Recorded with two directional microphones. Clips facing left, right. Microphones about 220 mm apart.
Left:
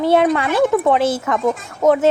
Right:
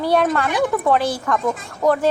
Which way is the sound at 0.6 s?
25° left (ahead or behind).